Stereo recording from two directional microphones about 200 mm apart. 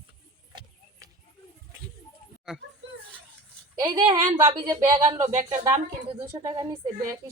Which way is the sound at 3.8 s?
25° right (ahead or behind).